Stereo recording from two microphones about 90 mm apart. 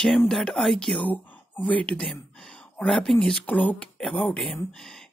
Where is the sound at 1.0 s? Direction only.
20° left (ahead or behind).